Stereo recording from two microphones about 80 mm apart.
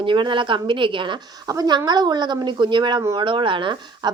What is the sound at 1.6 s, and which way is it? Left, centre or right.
A woman's voice, right.